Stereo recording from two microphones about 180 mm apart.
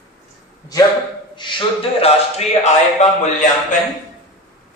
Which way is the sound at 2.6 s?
40° left (ahead or behind).